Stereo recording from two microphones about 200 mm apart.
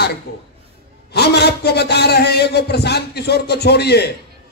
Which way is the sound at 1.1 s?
55° left (ahead or behind).